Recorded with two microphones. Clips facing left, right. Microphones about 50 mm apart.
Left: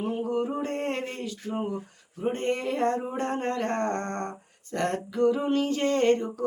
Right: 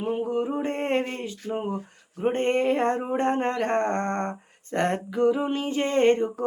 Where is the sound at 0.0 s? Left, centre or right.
Centre.